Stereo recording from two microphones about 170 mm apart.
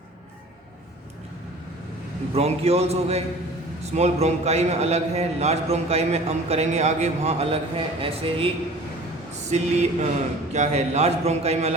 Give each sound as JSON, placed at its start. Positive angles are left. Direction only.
{"t": 2.3, "sound": "a man's voice", "side_deg": -40}
{"t": 9.3, "sound": "a sound", "side_deg": -40}
{"t": 10.5, "sound": "a man's voice", "side_deg": -40}